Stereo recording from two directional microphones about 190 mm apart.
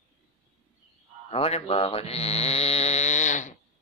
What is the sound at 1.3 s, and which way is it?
Speech, 30° left (ahead or behind).